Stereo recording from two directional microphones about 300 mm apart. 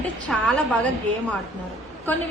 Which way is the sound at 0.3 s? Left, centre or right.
Centre.